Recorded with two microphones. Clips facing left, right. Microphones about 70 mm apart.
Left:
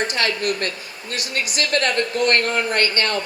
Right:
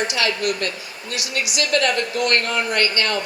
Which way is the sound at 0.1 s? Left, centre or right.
Left.